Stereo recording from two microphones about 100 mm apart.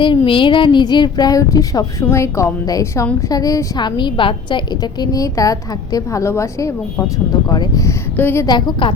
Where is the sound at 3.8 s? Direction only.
50° left (ahead or behind); by 6.7 s 30° left (ahead or behind).